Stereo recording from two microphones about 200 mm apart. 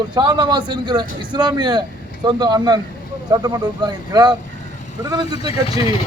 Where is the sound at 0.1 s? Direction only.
20° right (ahead or behind).